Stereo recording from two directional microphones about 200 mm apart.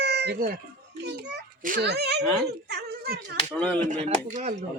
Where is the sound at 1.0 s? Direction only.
55° right (ahead or behind).